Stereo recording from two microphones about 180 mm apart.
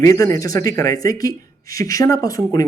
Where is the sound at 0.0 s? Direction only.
20° left (ahead or behind).